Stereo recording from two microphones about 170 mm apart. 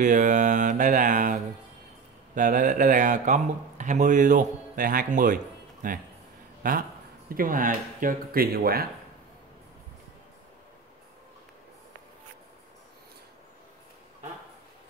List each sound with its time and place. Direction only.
0.0 s mantra: 50° right (ahead or behind)
2.3 s speech: 50° right (ahead or behind)